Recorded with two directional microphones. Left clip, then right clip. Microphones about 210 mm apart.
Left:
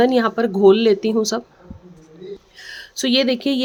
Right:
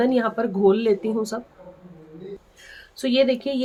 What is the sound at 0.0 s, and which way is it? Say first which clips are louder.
Speech: left 5 dB; 50° left (ahead or behind).